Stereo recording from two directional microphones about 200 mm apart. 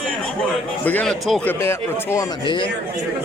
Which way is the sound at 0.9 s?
5° left (ahead or behind).